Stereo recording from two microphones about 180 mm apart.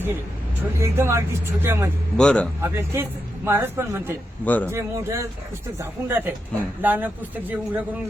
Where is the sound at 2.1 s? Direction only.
5° left (ahead or behind).